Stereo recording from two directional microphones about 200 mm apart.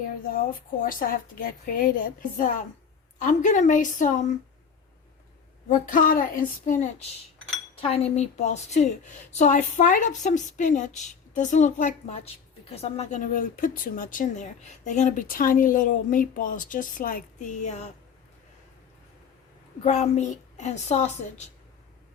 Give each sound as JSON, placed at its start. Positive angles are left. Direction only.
{"t": 0.8, "sound": "a woman's voice", "side_deg": 45}
{"t": 5.6, "sound": "a woman's voice", "side_deg": 40}
{"t": 19.8, "sound": "a woman's voice", "side_deg": 35}